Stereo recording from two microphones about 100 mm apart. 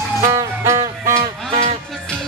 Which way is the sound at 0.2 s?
30° right (ahead or behind).